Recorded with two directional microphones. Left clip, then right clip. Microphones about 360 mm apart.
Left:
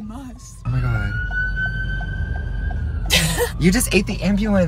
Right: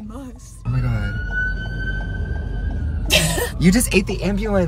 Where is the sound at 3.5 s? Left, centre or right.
Centre.